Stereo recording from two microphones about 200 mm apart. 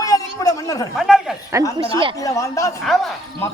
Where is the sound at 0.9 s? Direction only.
Centre (ahead or behind).